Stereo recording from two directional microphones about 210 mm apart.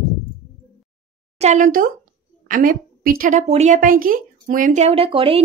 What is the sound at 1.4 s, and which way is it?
A woman's voice, 35° right (ahead or behind).